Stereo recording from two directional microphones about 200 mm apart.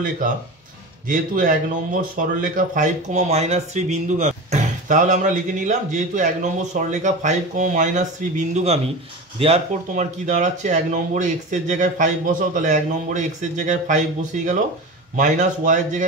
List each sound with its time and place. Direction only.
1.0 s speech: 40° right (ahead or behind)